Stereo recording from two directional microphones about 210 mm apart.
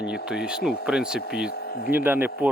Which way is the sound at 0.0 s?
5° right (ahead or behind).